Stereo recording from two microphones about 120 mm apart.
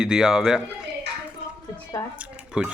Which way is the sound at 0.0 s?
5° right (ahead or behind).